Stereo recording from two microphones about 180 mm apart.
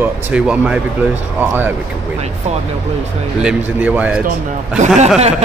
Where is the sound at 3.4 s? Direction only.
10° right (ahead or behind).